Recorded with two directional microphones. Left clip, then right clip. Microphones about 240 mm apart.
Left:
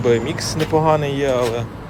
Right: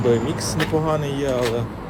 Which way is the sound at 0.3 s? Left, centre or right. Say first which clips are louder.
Left 4 dB; centre.